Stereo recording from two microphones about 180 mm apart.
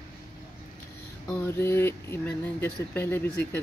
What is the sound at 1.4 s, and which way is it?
Speech, 15° left (ahead or behind).